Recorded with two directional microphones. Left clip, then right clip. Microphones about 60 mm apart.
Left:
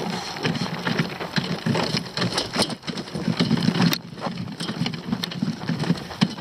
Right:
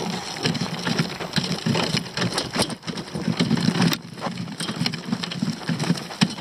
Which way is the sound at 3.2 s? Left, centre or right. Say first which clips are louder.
Even; centre.